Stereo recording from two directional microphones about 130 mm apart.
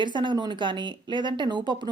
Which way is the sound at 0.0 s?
35° right (ahead or behind).